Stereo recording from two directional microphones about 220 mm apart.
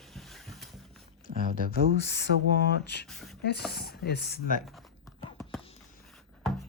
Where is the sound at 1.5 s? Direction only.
45° left (ahead or behind).